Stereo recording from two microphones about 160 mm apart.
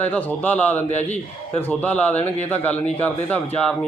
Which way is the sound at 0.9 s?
45° left (ahead or behind).